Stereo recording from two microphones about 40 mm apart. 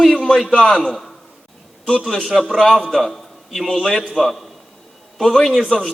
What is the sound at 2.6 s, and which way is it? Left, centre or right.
A man's voice, centre.